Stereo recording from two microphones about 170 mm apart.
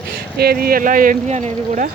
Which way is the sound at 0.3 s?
65° right (ahead or behind).